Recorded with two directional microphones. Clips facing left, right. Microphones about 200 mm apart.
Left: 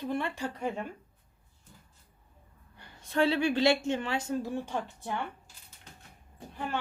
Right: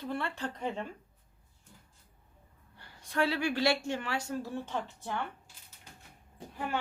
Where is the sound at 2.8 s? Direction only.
20° left (ahead or behind).